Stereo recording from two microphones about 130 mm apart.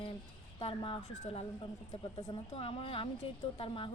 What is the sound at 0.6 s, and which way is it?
Speech, 45° left (ahead or behind).